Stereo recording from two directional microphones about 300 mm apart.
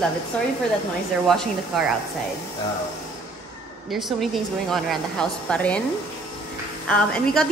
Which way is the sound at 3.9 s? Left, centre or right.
Centre.